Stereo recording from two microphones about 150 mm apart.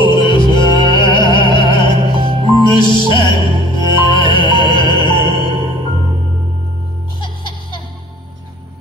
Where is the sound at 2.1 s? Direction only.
30° right (ahead or behind).